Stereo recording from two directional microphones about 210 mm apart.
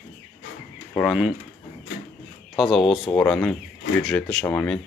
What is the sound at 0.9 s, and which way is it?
Speech, 5° left (ahead or behind).